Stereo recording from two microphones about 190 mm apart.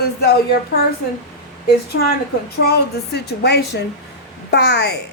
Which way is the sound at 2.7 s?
60° left (ahead or behind).